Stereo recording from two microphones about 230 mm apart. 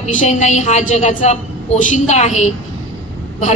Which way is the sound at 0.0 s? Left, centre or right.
Left.